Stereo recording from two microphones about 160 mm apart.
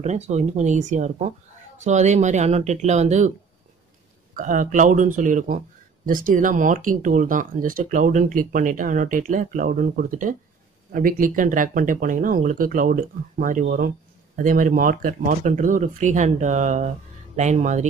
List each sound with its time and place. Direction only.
0.0 s speech: 45° right (ahead or behind)
4.4 s speech: 55° right (ahead or behind)